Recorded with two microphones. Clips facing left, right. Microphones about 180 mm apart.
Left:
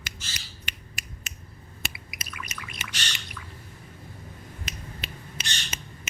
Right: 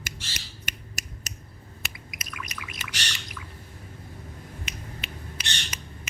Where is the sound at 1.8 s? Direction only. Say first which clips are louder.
Left 4 dB; 30° left (ahead or behind).